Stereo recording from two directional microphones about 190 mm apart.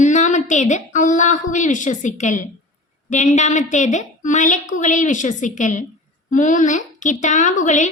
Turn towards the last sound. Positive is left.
turn(degrees=40)  # may be behind; listen again after turning